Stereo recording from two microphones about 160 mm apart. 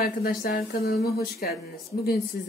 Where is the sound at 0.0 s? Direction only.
70° left (ahead or behind).